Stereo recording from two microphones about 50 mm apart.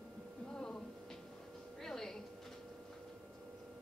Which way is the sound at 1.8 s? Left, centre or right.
Centre.